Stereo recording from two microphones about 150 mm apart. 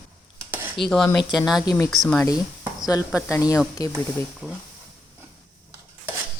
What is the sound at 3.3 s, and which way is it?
Speech, 20° left (ahead or behind).